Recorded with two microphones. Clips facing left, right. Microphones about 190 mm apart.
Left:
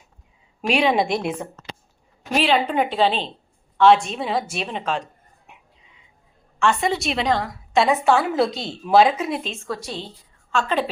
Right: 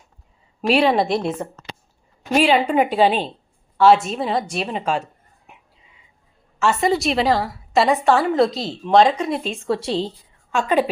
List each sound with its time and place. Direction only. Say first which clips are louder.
0.7 s a woman's voice: right 3 dB; 5° right (ahead or behind)
2.3 s a woman's voice: right 3 dB; 10° right (ahead or behind)
6.6 s a woman's voice: right 2 dB; 5° right (ahead or behind)
9.4 s a woman's voice: right 4 dB; 15° right (ahead or behind)
9.6 s a woman's voice: right 7 dB; 30° right (ahead or behind)
10.5 s a woman's voice: right 4 dB; 15° right (ahead or behind)